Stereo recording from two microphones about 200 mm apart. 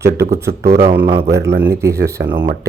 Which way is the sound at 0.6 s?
50° right (ahead or behind).